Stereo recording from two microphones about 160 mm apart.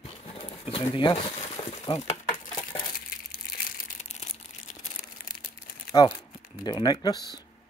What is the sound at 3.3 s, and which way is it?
Crushing, 70° left (ahead or behind).